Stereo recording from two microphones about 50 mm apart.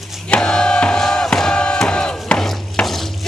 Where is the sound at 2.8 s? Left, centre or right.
Centre.